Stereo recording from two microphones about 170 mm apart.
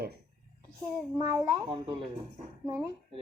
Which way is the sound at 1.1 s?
25° right (ahead or behind).